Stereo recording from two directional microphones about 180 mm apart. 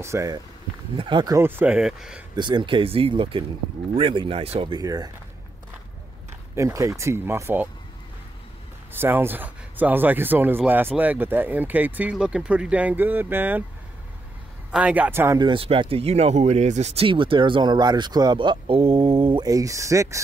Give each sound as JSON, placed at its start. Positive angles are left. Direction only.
{"t": 0.0, "sound": "speech", "side_deg": -15}
{"t": 2.3, "sound": "speech", "side_deg": -25}
{"t": 4.7, "sound": "speech", "side_deg": -20}
{"t": 6.5, "sound": "speech", "side_deg": -15}
{"t": 8.9, "sound": "speech", "side_deg": -10}
{"t": 14.7, "sound": "speech", "side_deg": -5}
{"t": 15.4, "sound": "speech", "side_deg": -30}
{"t": 19.4, "sound": "speech", "side_deg": -20}